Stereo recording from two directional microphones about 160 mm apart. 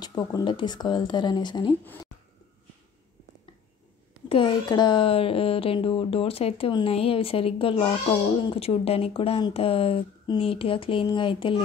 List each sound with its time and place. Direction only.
0.0 s speech: 25° left (ahead or behind)
4.3 s speech: 30° left (ahead or behind)